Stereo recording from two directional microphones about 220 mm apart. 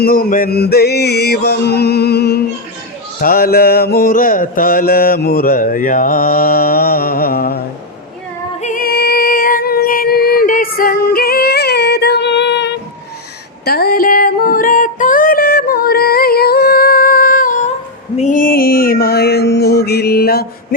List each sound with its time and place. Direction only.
0.0 s mantra: 40° left (ahead or behind)
8.6 s female singing: 40° left (ahead or behind)
18.2 s mantra: 35° left (ahead or behind)